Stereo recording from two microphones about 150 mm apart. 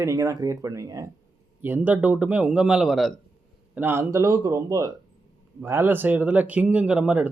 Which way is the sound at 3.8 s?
15° right (ahead or behind).